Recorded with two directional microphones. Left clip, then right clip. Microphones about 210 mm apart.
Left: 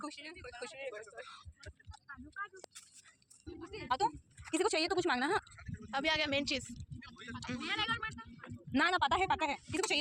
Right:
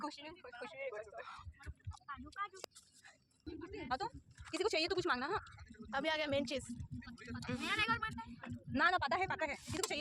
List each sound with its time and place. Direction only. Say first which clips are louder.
0.0 s speech: even; 30° left (ahead or behind)
0.3 s speech: left 3 dB; 50° left (ahead or behind)
1.2 s speech: even; 10° right (ahead or behind)
2.0 s a sound: right 1 dB; 25° right (ahead or behind)
3.4 s a sound: left 2 dB; 35° left (ahead or behind)
4.5 s speech: left 4 dB; 10° left (ahead or behind)
5.0 s speech: left 4 dB; 30° left (ahead or behind)
5.9 s speech: left 4 dB; centre (ahead or behind)
7.6 s speech: even; 55° right (ahead or behind)
8.7 s speech: left 3 dB; 30° left (ahead or behind)